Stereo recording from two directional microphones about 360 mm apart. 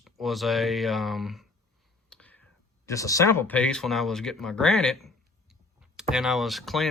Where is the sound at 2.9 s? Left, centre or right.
Centre.